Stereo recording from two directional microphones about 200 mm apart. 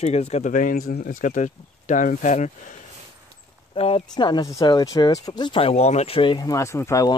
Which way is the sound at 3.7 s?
30° left (ahead or behind).